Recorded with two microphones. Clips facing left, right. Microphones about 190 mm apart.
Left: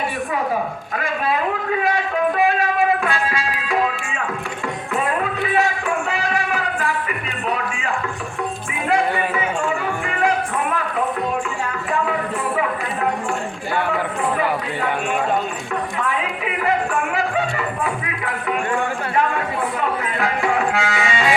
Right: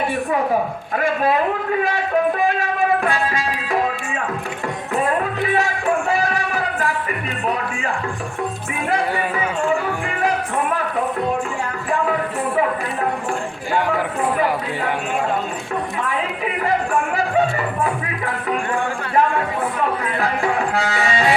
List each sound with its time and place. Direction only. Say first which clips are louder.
3.0 s music: right 1 dB; 40° right (ahead or behind)
20.1 s music: left 1 dB; 35° right (ahead or behind)